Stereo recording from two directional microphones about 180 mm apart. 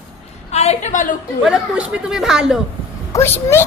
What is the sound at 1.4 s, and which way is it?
Speech, 5° right (ahead or behind).